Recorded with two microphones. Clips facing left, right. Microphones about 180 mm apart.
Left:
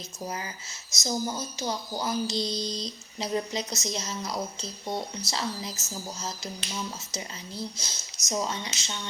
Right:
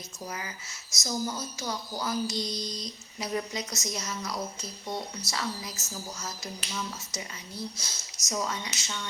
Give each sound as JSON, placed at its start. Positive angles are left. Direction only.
{"t": 0.3, "sound": "speech", "side_deg": 25}